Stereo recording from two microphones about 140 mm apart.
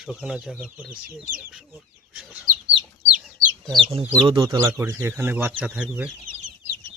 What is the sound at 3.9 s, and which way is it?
Speech, 35° right (ahead or behind).